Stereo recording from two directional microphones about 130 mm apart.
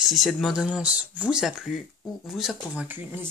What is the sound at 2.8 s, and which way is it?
Speech, 15° right (ahead or behind).